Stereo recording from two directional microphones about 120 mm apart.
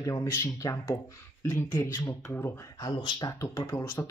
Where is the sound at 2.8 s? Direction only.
35° left (ahead or behind).